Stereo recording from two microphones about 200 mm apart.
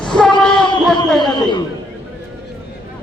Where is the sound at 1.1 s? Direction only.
20° left (ahead or behind).